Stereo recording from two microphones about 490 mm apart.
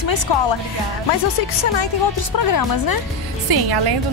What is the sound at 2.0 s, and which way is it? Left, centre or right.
Speech, left.